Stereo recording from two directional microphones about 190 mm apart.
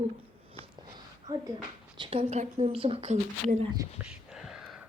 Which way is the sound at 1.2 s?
20° right (ahead or behind).